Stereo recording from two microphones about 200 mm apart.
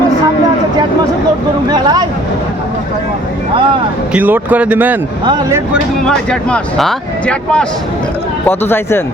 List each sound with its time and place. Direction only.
1.7 s speech: 20° right (ahead or behind)
4.1 s speech: 10° right (ahead or behind)
6.1 s speech: centre (ahead or behind)